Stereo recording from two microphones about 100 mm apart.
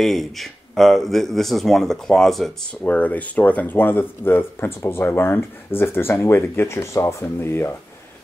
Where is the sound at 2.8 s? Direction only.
15° left (ahead or behind).